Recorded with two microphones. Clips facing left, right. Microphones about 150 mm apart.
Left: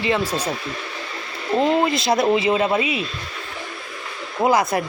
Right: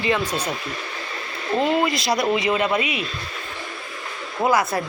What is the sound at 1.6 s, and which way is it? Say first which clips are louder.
Speech: left 2 dB; 30° left (ahead or behind).